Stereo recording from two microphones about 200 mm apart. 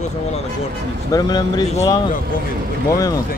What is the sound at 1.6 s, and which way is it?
Speech, 35° left (ahead or behind).